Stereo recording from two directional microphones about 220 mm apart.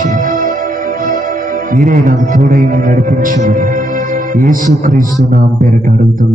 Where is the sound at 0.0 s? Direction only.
35° right (ahead or behind).